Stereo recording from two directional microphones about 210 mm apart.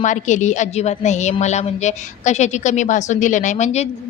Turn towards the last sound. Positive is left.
turn(degrees=30)  # may be behind; listen again after turning